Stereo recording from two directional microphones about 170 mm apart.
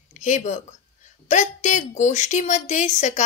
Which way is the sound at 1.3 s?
45° left (ahead or behind).